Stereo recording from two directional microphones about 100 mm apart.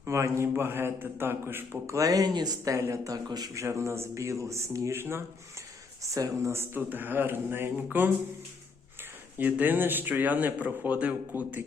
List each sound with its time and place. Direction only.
0.0 s a man's voice: 30° right (ahead or behind)
2.0 s speech: 35° right (ahead or behind)
2.7 s a man's voice: 30° right (ahead or behind)
6.0 s speech: 35° right (ahead or behind)
6.5 s a man's voice: 20° right (ahead or behind)
9.4 s speech: 15° right (ahead or behind)